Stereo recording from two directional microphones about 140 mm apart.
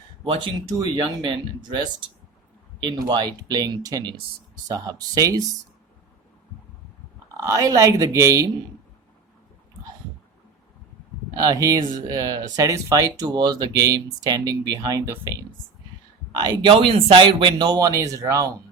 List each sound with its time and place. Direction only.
0.3 s speech: 35° right (ahead or behind)
2.8 s speech: 30° right (ahead or behind)
7.3 s speech: 20° right (ahead or behind)
11.3 s speech: 30° right (ahead or behind)
16.3 s speech: 30° right (ahead or behind)